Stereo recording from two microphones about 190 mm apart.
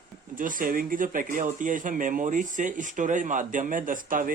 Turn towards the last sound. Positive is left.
turn(degrees=-45)  # may be behind; listen again after turning